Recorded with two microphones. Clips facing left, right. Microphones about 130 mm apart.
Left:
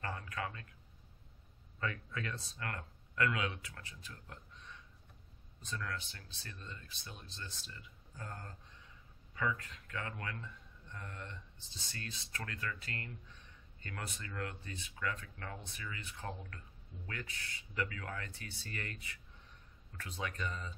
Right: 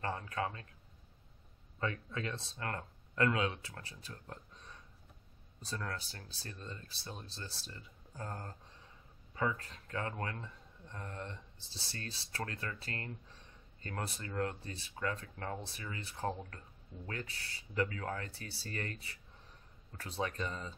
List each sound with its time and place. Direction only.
0.0 s speech: 30° right (ahead or behind)
1.8 s speech: 25° right (ahead or behind)